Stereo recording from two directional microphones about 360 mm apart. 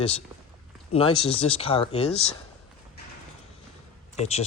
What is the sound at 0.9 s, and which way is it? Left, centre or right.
Speech, centre.